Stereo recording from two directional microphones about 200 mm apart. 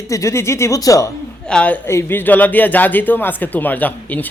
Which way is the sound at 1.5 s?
5° left (ahead or behind).